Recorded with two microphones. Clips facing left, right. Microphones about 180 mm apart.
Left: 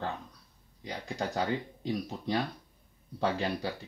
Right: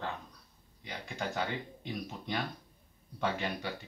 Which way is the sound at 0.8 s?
35° left (ahead or behind).